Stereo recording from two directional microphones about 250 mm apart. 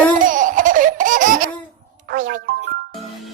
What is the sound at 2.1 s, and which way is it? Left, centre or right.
Music, right.